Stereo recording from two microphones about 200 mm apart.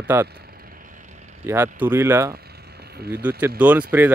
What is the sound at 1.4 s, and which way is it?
Speech, 15° right (ahead or behind).